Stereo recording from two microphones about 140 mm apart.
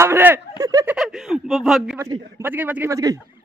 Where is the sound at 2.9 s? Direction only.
25° right (ahead or behind).